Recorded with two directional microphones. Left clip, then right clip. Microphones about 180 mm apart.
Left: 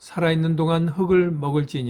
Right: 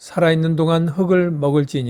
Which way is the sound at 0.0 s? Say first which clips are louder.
Right 6 dB; 35° right (ahead or behind).